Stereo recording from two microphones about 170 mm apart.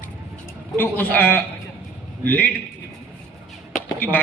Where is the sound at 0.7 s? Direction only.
10° left (ahead or behind).